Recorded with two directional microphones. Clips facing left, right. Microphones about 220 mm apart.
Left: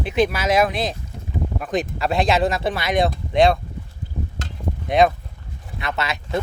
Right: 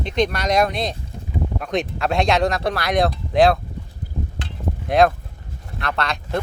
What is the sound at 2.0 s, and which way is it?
Speech, centre (ahead or behind).